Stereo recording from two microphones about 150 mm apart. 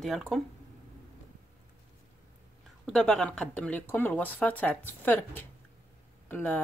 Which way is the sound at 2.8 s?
5° left (ahead or behind).